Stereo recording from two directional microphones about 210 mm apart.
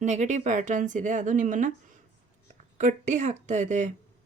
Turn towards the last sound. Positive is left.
turn(degrees=-35)  # may be behind; listen again after turning